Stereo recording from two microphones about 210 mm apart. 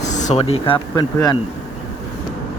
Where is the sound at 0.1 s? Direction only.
35° left (ahead or behind); by 1.4 s 20° left (ahead or behind).